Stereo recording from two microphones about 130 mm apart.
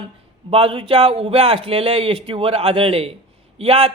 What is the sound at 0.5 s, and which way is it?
A man's voice, 45° right (ahead or behind).